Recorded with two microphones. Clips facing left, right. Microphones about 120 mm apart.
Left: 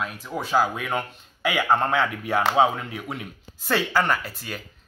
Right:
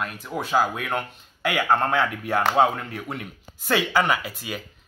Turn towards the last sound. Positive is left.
turn(degrees=-5)  # may be behind; listen again after turning